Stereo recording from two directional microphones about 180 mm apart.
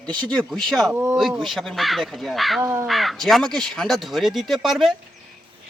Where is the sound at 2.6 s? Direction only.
15° right (ahead or behind).